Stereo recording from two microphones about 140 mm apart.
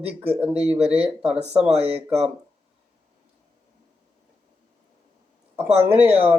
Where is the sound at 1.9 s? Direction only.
10° right (ahead or behind).